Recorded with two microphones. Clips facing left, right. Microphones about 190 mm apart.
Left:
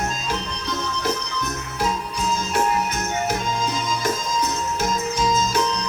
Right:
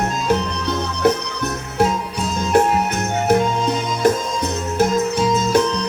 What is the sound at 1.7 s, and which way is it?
Music, 60° right (ahead or behind).